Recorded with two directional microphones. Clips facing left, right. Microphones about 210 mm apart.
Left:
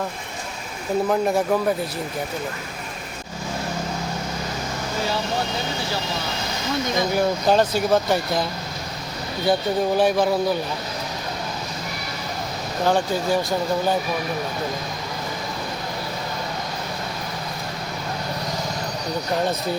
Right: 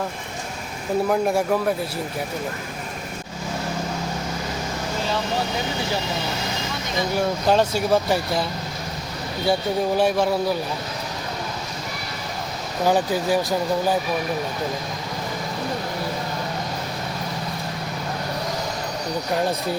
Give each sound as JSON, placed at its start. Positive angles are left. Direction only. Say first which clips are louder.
{"t": 1.0, "sound": "speech", "louder": "even", "side_deg": 0}
{"t": 7.2, "sound": "speech", "louder": "even", "side_deg": 0}
{"t": 9.5, "sound": "speech", "louder": "left 1 dB", "side_deg": 0}
{"t": 12.8, "sound": "speech", "louder": "right 1 dB", "side_deg": -10}